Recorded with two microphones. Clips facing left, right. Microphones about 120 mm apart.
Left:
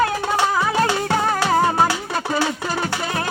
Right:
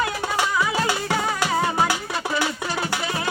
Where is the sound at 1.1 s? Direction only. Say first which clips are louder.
Left 4 dB; 45° left (ahead or behind).